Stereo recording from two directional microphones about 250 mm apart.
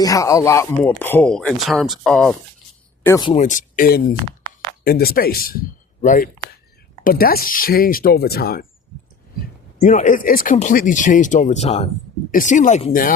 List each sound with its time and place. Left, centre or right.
0.0 s speech: centre
3.0 s speech: centre
3.3 s speech: left
9.8 s speech: left